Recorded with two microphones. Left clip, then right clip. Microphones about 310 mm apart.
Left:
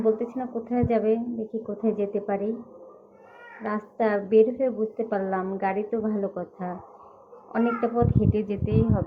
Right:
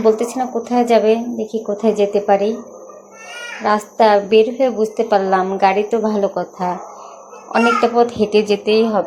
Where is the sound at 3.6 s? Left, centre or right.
Right.